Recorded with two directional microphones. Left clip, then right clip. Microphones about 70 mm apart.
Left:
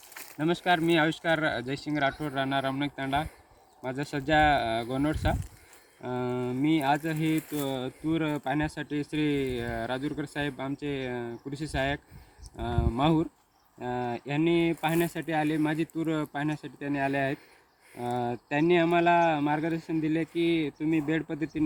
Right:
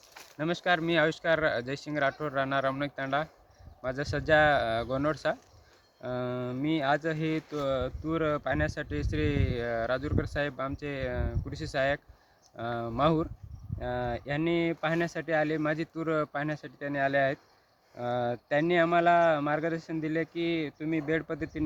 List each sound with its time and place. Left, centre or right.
0.3 s speech: right